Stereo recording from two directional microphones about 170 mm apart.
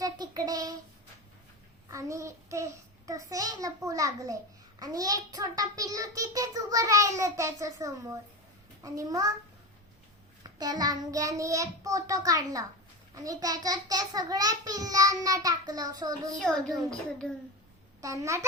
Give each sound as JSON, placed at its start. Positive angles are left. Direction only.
{"t": 0.0, "sound": "a sound", "side_deg": -20}
{"t": 1.9, "sound": "a child's voice", "side_deg": -20}
{"t": 10.6, "sound": "a child's voice", "side_deg": -20}
{"t": 17.2, "sound": "a child's voice", "side_deg": 5}
{"t": 18.0, "sound": "a child's voice", "side_deg": -20}